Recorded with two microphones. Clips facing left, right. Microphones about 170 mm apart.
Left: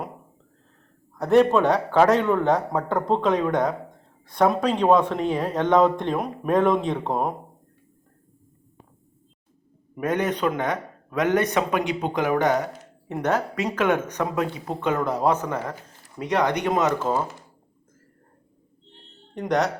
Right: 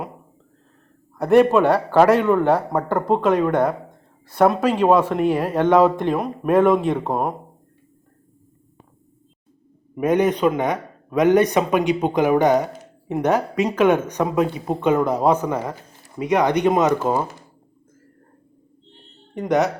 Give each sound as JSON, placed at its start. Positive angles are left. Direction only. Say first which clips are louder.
{"t": 1.2, "sound": "speech", "louder": "right 3 dB", "side_deg": -10}
{"t": 9.9, "sound": "a man's voice", "louder": "right 6 dB", "side_deg": -15}
{"t": 19.3, "sound": "speech", "louder": "right 4 dB", "side_deg": -5}